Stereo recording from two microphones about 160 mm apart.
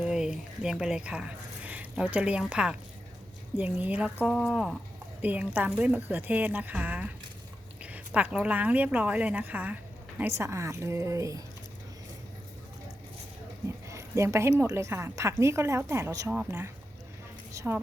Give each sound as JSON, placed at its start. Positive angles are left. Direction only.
{"t": 0.0, "sound": "a woman's voice", "side_deg": -5}
{"t": 13.8, "sound": "a woman's voice", "side_deg": -20}